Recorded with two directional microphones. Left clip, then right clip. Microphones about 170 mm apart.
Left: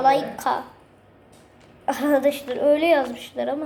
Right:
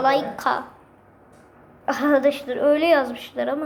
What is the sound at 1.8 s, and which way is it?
A woman's voice, 5° right (ahead or behind).